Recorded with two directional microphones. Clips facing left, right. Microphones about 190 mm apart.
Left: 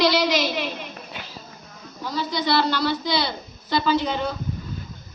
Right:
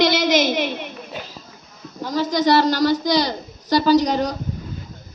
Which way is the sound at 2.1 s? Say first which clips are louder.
Right 6 dB; 45° right (ahead or behind).